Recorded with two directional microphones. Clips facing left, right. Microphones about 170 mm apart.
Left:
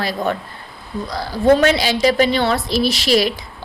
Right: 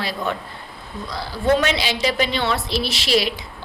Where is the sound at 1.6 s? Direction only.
40° left (ahead or behind).